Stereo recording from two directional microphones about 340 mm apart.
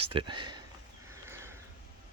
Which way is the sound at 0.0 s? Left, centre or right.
Centre.